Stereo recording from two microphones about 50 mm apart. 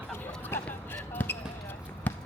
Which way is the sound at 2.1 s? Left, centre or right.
Left.